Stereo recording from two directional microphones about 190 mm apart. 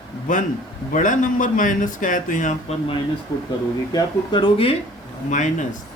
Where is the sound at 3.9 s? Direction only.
25° left (ahead or behind).